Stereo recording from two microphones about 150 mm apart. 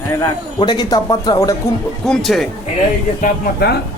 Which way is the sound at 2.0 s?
Centre (ahead or behind).